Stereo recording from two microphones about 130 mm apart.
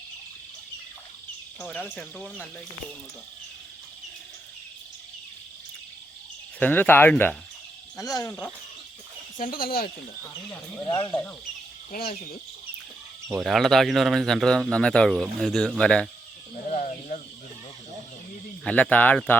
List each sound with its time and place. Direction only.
1.5 s speech: 5° left (ahead or behind)
6.6 s speech: 15° left (ahead or behind)
7.9 s speech: 25° left (ahead or behind)
9.4 s speech: 90° left
10.8 s speech: 35° left (ahead or behind)
13.4 s speech: centre (ahead or behind)
16.7 s cricket: 65° left (ahead or behind)
18.6 s speech: 10° left (ahead or behind)